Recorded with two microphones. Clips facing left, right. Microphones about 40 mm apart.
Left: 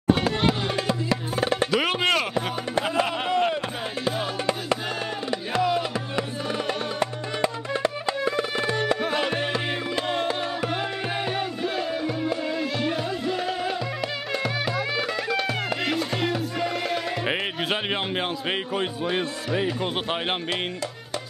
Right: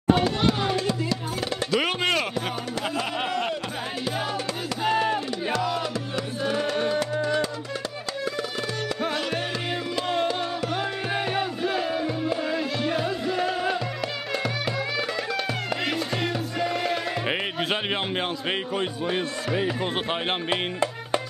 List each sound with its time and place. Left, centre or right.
0.1 s music: centre; by 1.7 s left
1.8 s music: centre
3.3 s music: centre
4.8 s music: centre
5.6 s music: centre
8.4 s tabla: left
9.1 s music: left
10.7 s music: centre
11.1 s music: centre
18.5 s speech: centre